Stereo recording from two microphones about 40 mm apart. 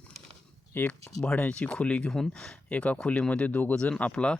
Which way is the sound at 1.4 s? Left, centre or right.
Left.